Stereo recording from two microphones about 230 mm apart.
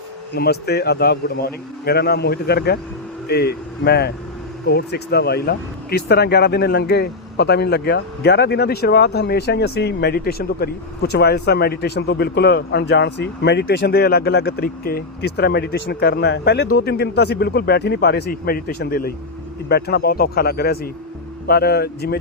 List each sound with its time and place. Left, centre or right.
0.3 s speech: left